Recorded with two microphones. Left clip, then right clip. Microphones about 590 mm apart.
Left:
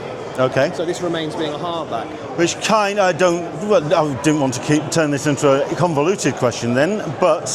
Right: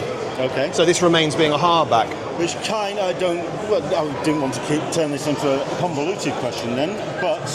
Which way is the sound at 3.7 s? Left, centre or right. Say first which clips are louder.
Left 5 dB; left.